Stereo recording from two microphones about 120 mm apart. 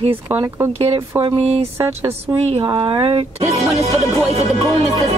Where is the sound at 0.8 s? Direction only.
55° right (ahead or behind).